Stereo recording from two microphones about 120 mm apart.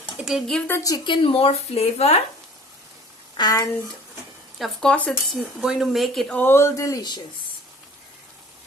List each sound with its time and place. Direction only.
0.0 s a sound: 5° right (ahead or behind)
0.7 s speech: 30° left (ahead or behind); by 2.1 s 60° left (ahead or behind)
3.3 s speech: 35° left (ahead or behind)
4.5 s speech: centre (ahead or behind)
5.5 s speech: 5° right (ahead or behind)
6.3 s speech: 20° left (ahead or behind)